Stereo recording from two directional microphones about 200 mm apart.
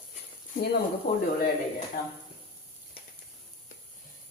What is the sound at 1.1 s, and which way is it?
Speech, 45° left (ahead or behind).